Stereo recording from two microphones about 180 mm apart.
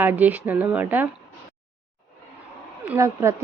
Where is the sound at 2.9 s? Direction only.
15° right (ahead or behind).